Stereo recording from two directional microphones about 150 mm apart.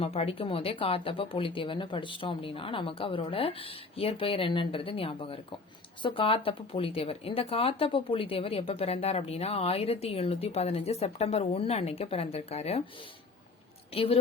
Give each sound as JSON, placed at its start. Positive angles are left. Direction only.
{"t": 0.0, "sound": "speech", "side_deg": 40}
{"t": 13.9, "sound": "speech", "side_deg": 40}